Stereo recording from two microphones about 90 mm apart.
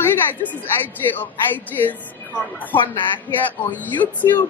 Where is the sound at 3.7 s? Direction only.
20° left (ahead or behind).